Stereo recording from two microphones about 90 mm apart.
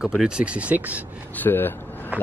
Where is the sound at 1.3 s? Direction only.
20° left (ahead or behind).